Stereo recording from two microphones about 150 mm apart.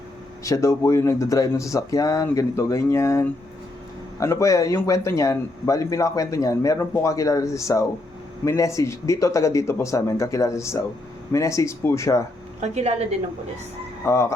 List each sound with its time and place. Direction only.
0.4 s a man's voice: 20° left (ahead or behind)
12.5 s a woman's voice: 50° right (ahead or behind)
14.0 s a man's voice: 20° left (ahead or behind)